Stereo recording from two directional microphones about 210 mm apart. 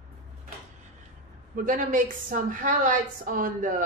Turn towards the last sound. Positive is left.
turn(degrees=-40)  # may be behind; listen again after turning